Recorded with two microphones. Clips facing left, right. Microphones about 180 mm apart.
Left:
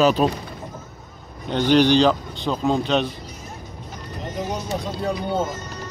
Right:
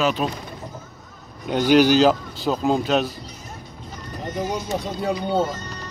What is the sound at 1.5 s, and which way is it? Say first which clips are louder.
Speech: right 1 dB; 10° right (ahead or behind).